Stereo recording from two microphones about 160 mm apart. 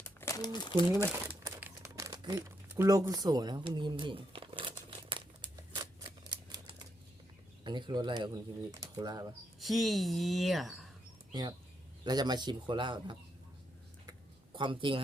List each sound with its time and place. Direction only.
0.0 s crumpling: 15° left (ahead or behind)
0.9 s crumpling: 15° right (ahead or behind); by 5.2 s 35° right (ahead or behind)
5.7 s typewriter: 25° right (ahead or behind)
7.6 s speech: 30° right (ahead or behind)
9.6 s a woman's voice: centre (ahead or behind)
11.3 s speech: 25° right (ahead or behind)
14.1 s a sound: 30° right (ahead or behind)